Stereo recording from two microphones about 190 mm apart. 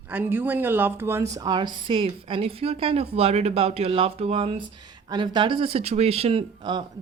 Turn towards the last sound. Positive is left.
turn(degrees=-25)  # may be behind; listen again after turning